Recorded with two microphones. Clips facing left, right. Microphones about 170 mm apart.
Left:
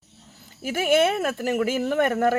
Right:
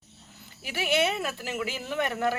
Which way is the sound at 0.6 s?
45° left (ahead or behind).